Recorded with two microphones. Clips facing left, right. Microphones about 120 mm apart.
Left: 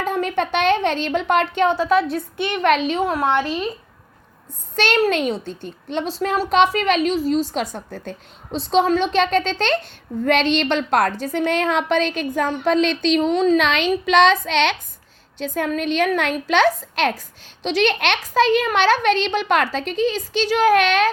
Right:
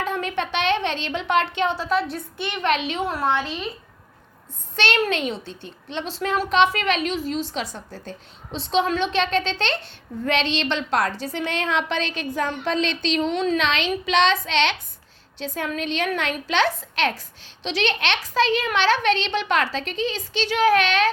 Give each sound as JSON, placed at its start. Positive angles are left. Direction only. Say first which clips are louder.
{"t": 0.0, "sound": "a woman's voice", "louder": "left 4 dB", "side_deg": 40}
{"t": 3.2, "sound": "a woman's voice", "louder": "left 4 dB", "side_deg": 55}
{"t": 4.7, "sound": "a child's voice", "louder": "left 4 dB", "side_deg": 40}
{"t": 8.5, "sound": "a woman's voice", "louder": "left 5 dB", "side_deg": 40}